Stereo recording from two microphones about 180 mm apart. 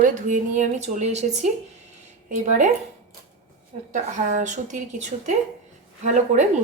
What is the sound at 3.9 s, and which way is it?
Speech, 45° right (ahead or behind).